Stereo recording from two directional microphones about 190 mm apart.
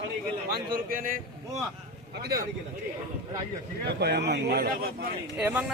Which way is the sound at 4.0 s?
60° right (ahead or behind).